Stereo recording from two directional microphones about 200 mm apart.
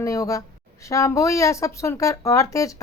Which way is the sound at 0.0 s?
15° left (ahead or behind).